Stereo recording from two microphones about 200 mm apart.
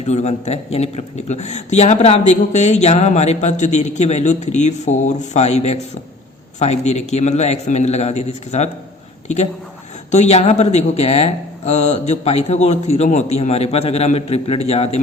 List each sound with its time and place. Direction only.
0.0 s a man's voice: 35° left (ahead or behind)